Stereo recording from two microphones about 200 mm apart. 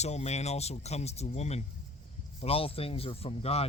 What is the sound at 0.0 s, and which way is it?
Speech, 35° left (ahead or behind).